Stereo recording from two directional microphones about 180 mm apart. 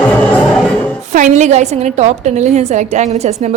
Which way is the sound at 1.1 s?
40° right (ahead or behind).